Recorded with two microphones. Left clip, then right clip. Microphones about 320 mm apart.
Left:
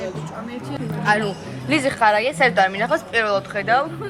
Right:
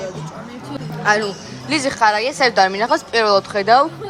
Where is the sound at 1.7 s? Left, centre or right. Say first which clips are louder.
Right 1 dB; centre.